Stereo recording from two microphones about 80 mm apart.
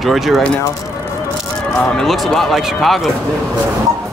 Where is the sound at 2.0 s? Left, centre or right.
Centre.